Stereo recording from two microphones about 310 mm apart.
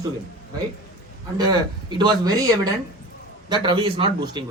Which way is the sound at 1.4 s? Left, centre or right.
Centre.